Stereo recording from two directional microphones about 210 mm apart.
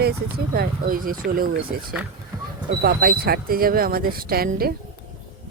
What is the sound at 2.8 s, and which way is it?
Speech, 45° right (ahead or behind).